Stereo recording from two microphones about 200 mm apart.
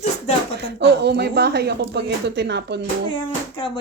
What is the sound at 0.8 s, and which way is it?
A woman's voice, 55° right (ahead or behind).